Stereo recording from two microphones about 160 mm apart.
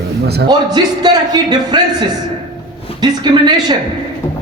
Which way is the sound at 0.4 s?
25° right (ahead or behind).